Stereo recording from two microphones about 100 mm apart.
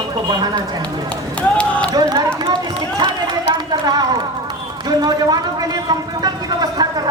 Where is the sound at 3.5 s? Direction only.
45° right (ahead or behind).